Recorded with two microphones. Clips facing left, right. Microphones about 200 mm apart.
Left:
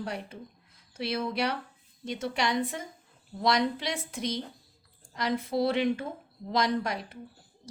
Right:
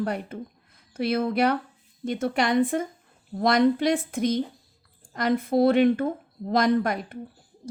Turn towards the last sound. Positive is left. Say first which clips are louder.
# right 7 dB
turn(degrees=-55)  # may be behind; listen again after turning